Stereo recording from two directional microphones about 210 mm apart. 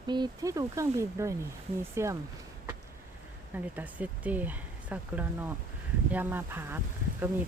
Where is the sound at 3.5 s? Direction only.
5° right (ahead or behind).